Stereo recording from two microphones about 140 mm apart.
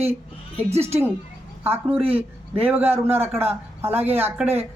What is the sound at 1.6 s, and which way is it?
Speech, 15° right (ahead or behind).